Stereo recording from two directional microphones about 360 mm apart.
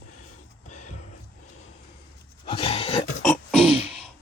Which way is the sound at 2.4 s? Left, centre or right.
Centre.